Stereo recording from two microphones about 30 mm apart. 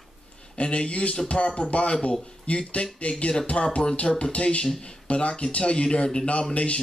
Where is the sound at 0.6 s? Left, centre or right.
Left.